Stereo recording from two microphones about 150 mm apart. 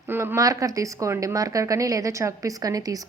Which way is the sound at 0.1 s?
15° right (ahead or behind).